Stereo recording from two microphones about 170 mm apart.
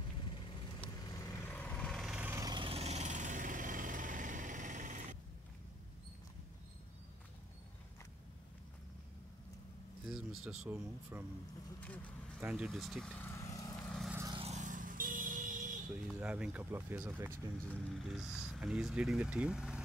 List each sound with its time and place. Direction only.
1.0 s lawn mower: 20° left (ahead or behind); by 2.4 s 10° right (ahead or behind)
2.4 s engine: 30° right (ahead or behind); by 5.0 s 50° right (ahead or behind)
10.0 s speech: centre (ahead or behind)
11.8 s speech: 10° left (ahead or behind)
12.4 s speech: 10° right (ahead or behind); by 13.7 s 20° left (ahead or behind)
13.8 s vehicle: centre (ahead or behind)
14.3 s vehicle: 40° right (ahead or behind)
16.1 s speech: 5° right (ahead or behind)
17.6 s speech: centre (ahead or behind)